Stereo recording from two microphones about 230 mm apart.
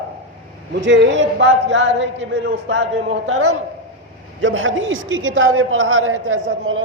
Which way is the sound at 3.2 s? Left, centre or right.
Right.